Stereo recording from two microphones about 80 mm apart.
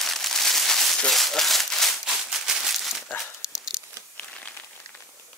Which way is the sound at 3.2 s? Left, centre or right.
Centre.